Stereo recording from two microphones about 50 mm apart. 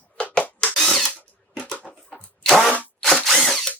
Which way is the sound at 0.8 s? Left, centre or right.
Centre.